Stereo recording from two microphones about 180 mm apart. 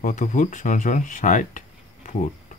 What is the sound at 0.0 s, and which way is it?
Speech, 45° left (ahead or behind).